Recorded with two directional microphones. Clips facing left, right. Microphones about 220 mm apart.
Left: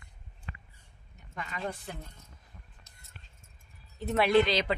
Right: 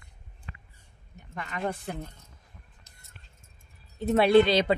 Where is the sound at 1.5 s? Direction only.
55° right (ahead or behind).